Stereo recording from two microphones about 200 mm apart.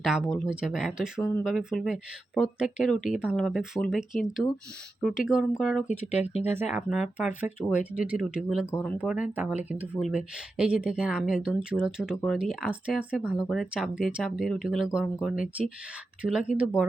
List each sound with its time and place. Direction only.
0.0 s speech: centre (ahead or behind)
6.1 s speech: 30° left (ahead or behind)
6.7 s speech: 5° right (ahead or behind)
8.7 s speech: 5° left (ahead or behind)
9.0 s speech: 5° right (ahead or behind)